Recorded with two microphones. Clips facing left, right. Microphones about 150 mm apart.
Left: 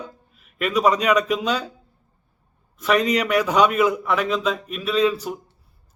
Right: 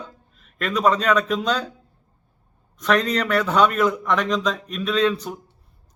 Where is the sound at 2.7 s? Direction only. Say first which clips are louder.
Left 1 dB; 5° left (ahead or behind).